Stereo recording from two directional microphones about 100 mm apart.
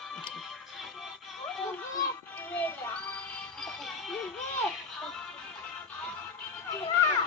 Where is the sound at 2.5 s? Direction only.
15° left (ahead or behind).